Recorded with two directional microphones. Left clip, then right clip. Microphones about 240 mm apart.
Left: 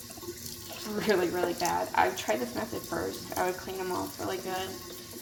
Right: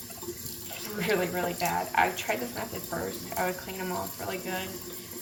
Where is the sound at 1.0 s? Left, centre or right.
Left.